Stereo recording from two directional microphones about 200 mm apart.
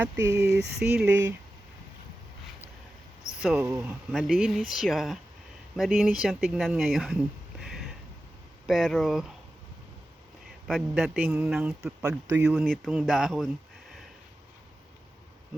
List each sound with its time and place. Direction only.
0.0 s speech: 10° right (ahead or behind)
0.4 s speech: 55° right (ahead or behind)
0.8 s speech: 5° right (ahead or behind)
3.4 s speech: centre (ahead or behind)
8.6 s speech: centre (ahead or behind)
10.7 s speech: centre (ahead or behind)